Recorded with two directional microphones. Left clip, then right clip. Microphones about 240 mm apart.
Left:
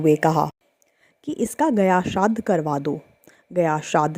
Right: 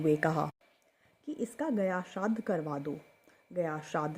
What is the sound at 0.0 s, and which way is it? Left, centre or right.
Speech, left.